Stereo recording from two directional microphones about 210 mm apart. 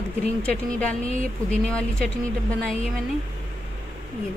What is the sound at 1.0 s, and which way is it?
Speech, 30° left (ahead or behind).